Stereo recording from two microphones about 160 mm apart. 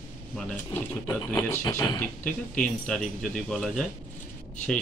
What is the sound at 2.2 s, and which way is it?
Speech, 5° left (ahead or behind).